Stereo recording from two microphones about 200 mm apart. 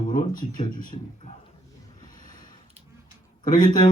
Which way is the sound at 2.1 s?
40° left (ahead or behind).